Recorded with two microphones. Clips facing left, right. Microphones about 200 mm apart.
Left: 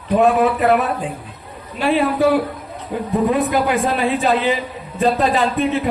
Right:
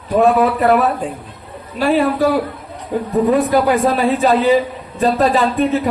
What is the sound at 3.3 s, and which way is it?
A man's voice, 40° right (ahead or behind).